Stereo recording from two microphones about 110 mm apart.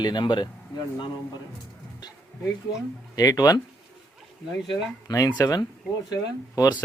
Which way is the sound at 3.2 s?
35° left (ahead or behind).